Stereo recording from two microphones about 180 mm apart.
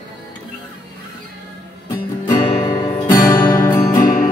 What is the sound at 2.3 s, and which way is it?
Music, 35° left (ahead or behind).